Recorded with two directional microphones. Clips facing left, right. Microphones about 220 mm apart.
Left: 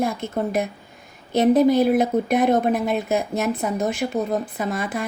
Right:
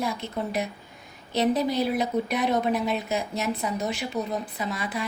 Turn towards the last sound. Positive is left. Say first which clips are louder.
# left 5 dB
turn(degrees=50)  # may be behind; listen again after turning